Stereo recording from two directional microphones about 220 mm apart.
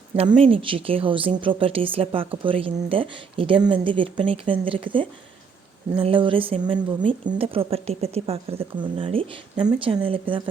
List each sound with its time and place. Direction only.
0.2 s speech: 25° right (ahead or behind)